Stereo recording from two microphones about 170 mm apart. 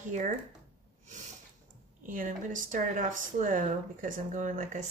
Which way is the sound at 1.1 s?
45° right (ahead or behind).